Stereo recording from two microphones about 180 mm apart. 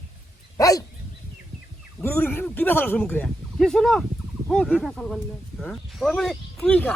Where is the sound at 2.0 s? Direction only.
10° left (ahead or behind).